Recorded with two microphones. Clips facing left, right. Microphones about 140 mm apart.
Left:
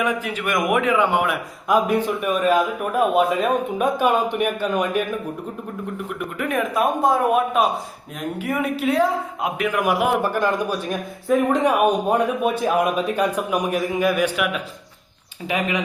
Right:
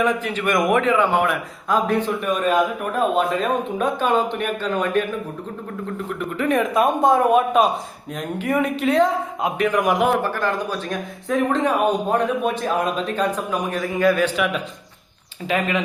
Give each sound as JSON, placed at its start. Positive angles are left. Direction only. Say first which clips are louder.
{"t": 0.0, "sound": "a man's voice", "louder": "right 2 dB", "side_deg": 10}
{"t": 6.1, "sound": "a man's voice", "louder": "right 5 dB", "side_deg": 10}